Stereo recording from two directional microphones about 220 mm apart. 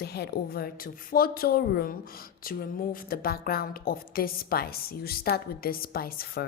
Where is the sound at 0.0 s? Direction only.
45° left (ahead or behind).